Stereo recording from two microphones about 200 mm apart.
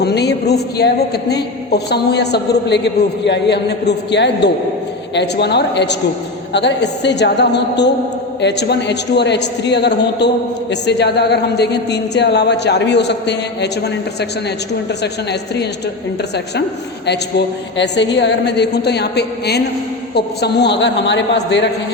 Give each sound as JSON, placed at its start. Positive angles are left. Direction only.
{"t": 0.0, "sound": "a man's voice", "side_deg": 55}
{"t": 17.1, "sound": "a man's voice", "side_deg": 60}